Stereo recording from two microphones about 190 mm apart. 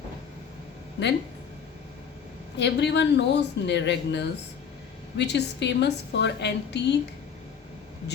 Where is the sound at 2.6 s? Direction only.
65° left (ahead or behind).